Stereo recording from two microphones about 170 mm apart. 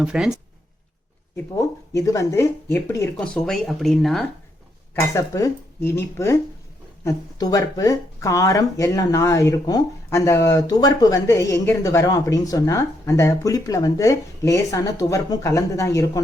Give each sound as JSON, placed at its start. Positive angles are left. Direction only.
{"t": 0.0, "sound": "speech", "side_deg": -5}
{"t": 1.5, "sound": "speech", "side_deg": 20}
{"t": 3.2, "sound": "speech", "side_deg": 5}
{"t": 4.9, "sound": "speech", "side_deg": 20}